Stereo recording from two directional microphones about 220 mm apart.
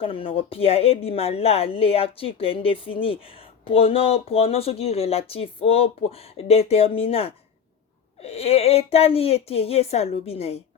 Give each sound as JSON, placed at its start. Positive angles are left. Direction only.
{"t": 0.0, "sound": "a woman's voice", "side_deg": 25}